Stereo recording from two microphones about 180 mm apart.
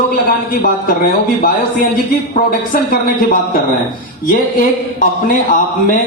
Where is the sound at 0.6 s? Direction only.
55° left (ahead or behind).